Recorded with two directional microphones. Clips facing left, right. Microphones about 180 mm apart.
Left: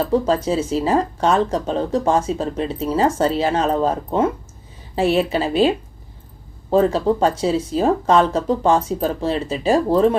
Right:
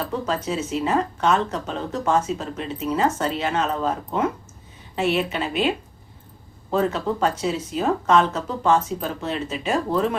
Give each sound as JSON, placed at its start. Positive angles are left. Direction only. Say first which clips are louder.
{"t": 0.0, "sound": "speech", "louder": "left 8 dB", "side_deg": 30}